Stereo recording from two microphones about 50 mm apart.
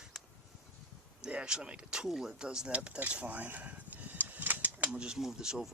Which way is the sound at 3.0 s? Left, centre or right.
Right.